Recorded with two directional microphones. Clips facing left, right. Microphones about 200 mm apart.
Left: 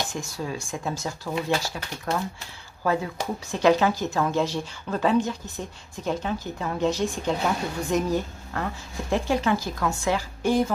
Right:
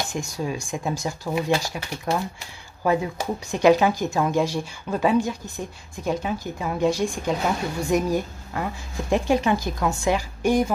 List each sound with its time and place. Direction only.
0.1 s a woman's voice: 15° right (ahead or behind)